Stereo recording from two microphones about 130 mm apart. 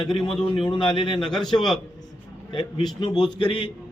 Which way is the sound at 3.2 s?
40° left (ahead or behind).